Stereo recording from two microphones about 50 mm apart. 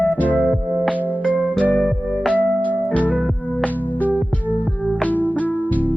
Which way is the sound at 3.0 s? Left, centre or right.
Right.